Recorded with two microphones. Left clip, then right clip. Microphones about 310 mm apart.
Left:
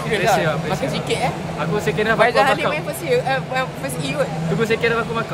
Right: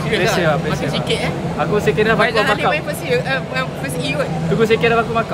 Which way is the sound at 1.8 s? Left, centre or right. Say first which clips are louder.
Right 3 dB; centre.